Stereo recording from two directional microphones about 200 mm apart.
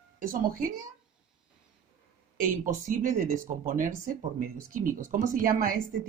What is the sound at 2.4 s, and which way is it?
Speech, 40° right (ahead or behind).